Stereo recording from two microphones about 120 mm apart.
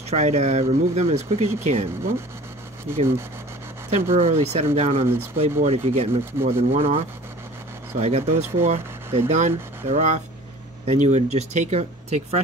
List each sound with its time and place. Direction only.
0.1 s speech: 65° right (ahead or behind)
3.9 s speech: 60° right (ahead or behind)
8.0 s speech: 65° right (ahead or behind)
9.3 s speech: 75° right (ahead or behind)